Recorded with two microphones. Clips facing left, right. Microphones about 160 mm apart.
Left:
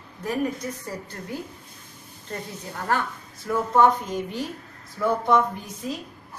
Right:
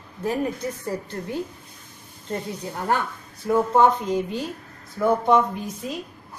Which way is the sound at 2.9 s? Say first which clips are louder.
Right 1 dB; 20° right (ahead or behind).